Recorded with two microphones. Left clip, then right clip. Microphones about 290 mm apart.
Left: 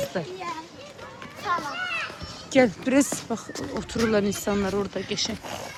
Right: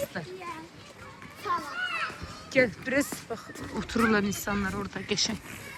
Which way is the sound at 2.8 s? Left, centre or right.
Centre.